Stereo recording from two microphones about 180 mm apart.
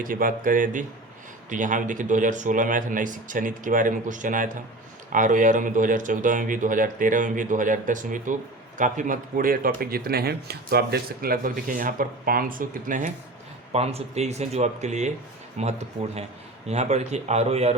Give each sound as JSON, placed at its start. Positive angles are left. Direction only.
{"t": 0.0, "sound": "speech", "side_deg": -50}
{"t": 13.7, "sound": "speech", "side_deg": -35}